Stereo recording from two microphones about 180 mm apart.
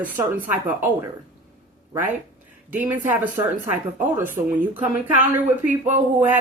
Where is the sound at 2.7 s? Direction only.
10° right (ahead or behind).